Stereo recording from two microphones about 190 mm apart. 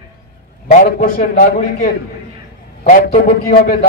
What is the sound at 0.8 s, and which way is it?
Speech, 45° left (ahead or behind).